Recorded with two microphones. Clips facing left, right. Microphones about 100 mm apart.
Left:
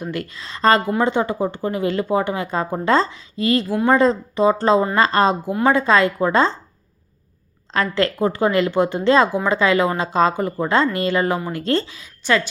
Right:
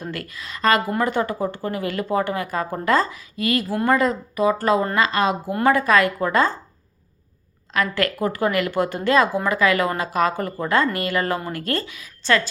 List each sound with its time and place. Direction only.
0.0 s speech: 20° left (ahead or behind)
5.6 s speech: 25° left (ahead or behind)
7.7 s speech: 30° left (ahead or behind); by 11.6 s 15° left (ahead or behind)
11.6 s speech: 25° left (ahead or behind)
12.2 s speech: 15° left (ahead or behind)